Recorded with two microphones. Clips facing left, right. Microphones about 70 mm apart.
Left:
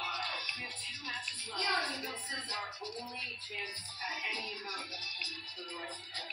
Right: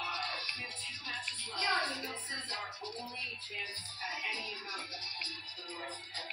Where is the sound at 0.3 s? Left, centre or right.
Right.